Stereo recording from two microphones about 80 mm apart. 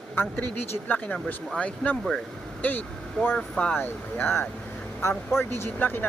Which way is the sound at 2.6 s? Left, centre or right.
Left.